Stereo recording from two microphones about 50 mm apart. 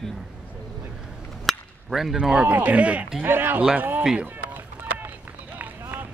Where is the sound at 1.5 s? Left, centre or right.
Centre.